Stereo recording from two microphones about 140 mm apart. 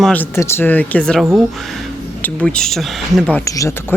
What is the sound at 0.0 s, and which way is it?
Speech, 10° left (ahead or behind).